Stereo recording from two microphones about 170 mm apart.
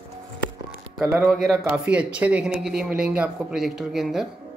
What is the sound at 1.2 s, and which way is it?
Speech, centre (ahead or behind).